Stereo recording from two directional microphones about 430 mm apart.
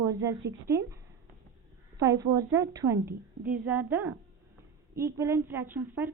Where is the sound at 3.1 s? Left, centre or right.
Right.